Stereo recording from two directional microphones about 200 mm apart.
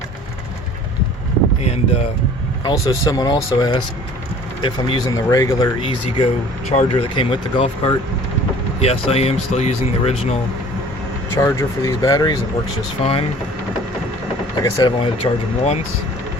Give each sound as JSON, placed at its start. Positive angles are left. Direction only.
{"t": 1.6, "sound": "speech", "side_deg": 30}
{"t": 2.6, "sound": "speech", "side_deg": 20}
{"t": 11.3, "sound": "speech", "side_deg": 15}
{"t": 13.0, "sound": "speech", "side_deg": 30}
{"t": 14.6, "sound": "speech", "side_deg": 20}